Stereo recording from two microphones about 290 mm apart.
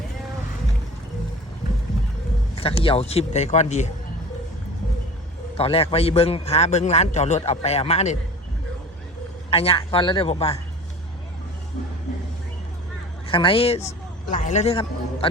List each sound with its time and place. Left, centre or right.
2.6 s a man's voice: centre
5.5 s a man's voice: centre
9.5 s a man's voice: centre
13.2 s a man's voice: centre